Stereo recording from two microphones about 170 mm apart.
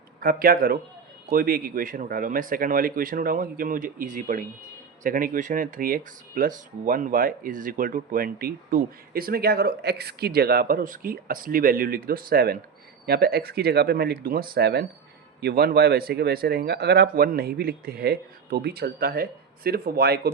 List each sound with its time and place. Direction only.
0.2 s speech: 60° right (ahead or behind)